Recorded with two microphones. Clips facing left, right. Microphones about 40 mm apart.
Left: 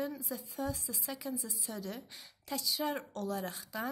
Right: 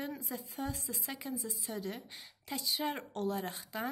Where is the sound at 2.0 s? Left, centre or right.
Centre.